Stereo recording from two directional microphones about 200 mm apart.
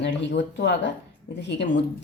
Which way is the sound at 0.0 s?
60° left (ahead or behind).